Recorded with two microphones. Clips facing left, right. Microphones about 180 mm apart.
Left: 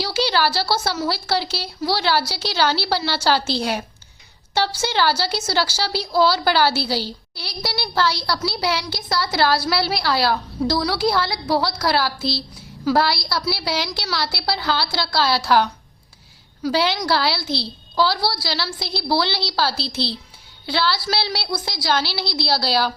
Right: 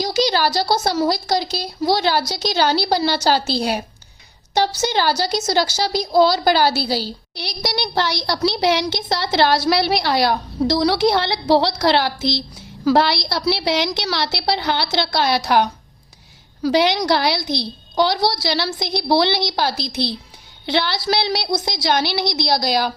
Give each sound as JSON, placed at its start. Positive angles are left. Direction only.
{"t": 0.0, "sound": "a sound", "side_deg": -15}
{"t": 1.0, "sound": "a child's voice", "side_deg": -15}
{"t": 16.7, "sound": "a child's voice", "side_deg": -15}